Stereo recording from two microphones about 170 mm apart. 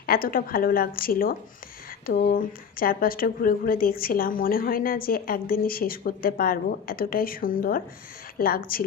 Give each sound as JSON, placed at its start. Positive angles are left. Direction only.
{"t": 0.0, "sound": "a woman's voice", "side_deg": 60}
{"t": 2.0, "sound": "speech", "side_deg": 85}
{"t": 2.3, "sound": "a woman's voice", "side_deg": 60}